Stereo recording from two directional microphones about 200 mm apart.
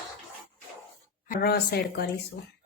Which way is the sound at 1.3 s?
50° left (ahead or behind).